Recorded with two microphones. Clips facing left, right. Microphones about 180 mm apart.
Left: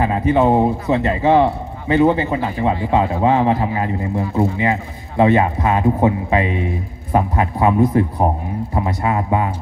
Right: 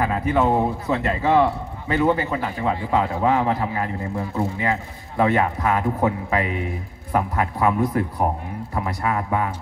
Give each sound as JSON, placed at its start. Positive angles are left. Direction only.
{"t": 0.0, "sound": "a man's voice", "side_deg": 20}